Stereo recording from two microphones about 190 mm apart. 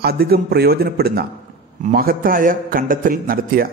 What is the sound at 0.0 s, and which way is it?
A man's voice, 55° right (ahead or behind).